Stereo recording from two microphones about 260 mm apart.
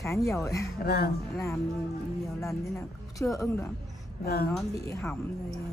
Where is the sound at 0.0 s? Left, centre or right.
Centre.